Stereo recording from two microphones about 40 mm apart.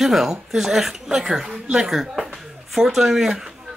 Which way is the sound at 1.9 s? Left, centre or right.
Centre.